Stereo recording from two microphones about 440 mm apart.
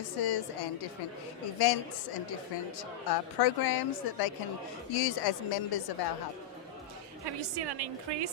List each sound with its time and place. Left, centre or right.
0.2 s a woman's voice: left
7.5 s a woman's voice: right